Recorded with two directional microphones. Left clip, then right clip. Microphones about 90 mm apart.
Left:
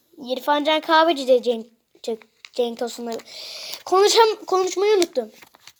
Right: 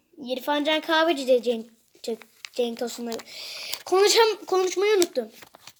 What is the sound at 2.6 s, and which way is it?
A child's voice, 25° left (ahead or behind).